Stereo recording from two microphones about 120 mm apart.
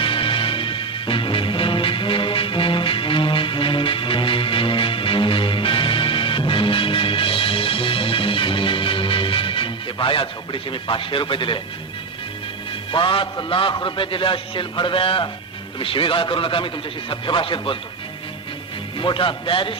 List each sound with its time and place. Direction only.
0.0 s music: 45° left (ahead or behind)
12.9 s a man's voice: 45° left (ahead or behind)
18.9 s a man's voice: 45° left (ahead or behind)